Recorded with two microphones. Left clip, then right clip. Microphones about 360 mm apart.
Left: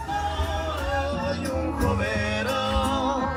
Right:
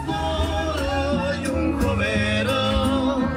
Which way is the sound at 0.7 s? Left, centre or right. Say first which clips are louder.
Right 3 dB; centre.